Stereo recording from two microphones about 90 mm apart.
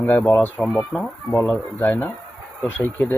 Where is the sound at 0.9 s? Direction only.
5° left (ahead or behind).